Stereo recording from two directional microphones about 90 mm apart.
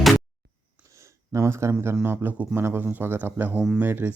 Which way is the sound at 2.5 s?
25° right (ahead or behind).